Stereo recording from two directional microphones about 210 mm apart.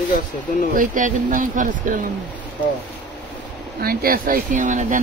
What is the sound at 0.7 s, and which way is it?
Speech, 40° right (ahead or behind).